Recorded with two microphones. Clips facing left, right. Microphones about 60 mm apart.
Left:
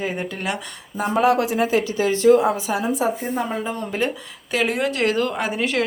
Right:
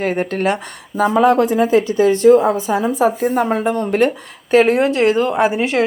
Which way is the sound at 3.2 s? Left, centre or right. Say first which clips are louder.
Right 8 dB; right.